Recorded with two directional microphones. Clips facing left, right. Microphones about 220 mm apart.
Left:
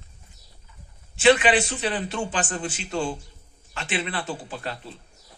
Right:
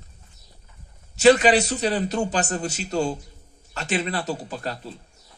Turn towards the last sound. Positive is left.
turn(degrees=-40)  # may be behind; listen again after turning